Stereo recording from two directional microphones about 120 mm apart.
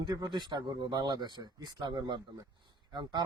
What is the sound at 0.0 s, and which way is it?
Speech, 40° right (ahead or behind).